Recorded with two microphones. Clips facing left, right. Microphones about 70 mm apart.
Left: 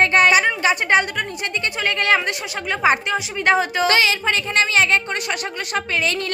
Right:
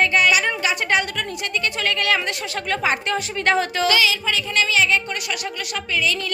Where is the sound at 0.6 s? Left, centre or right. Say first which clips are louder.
Left 4 dB; left.